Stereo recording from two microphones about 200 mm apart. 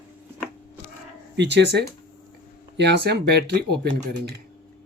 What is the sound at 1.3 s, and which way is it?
Speech, 60° right (ahead or behind).